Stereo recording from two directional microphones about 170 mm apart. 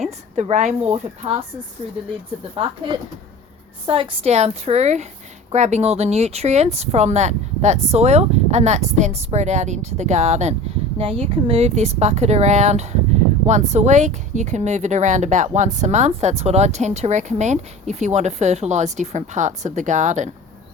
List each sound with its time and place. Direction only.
0.3 s speech: 45° right (ahead or behind)
2.6 s speech: 30° right (ahead or behind); by 20.3 s 45° right (ahead or behind)